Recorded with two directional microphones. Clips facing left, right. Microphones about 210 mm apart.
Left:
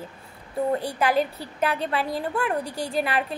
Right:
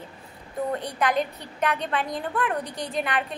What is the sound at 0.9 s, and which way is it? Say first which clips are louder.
A woman's voice: left 2 dB; 5° left (ahead or behind).